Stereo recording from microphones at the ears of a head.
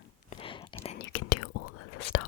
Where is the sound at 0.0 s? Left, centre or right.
Left.